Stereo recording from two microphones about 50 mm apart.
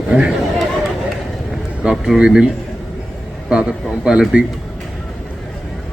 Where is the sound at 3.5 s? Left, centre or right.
Centre.